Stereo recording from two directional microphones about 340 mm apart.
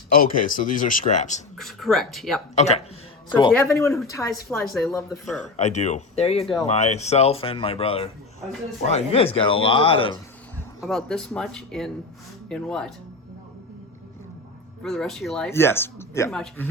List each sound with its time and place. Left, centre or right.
0.3 s speech: left
1.5 s speech: centre
2.6 s speech: centre
5.4 s speech: centre
6.4 s speech: centre
6.7 s speech: centre
10.8 s speech: centre
14.8 s speech: centre